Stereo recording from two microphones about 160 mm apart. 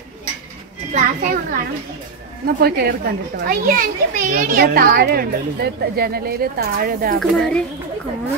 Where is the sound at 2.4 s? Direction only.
70° right (ahead or behind).